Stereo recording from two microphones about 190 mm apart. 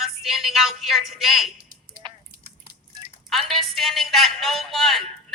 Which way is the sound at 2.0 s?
25° right (ahead or behind).